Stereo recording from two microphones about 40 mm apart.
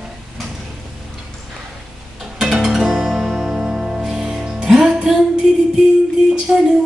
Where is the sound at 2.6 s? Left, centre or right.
Centre.